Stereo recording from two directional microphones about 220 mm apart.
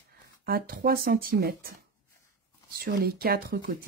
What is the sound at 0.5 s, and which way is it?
Speech, 40° right (ahead or behind).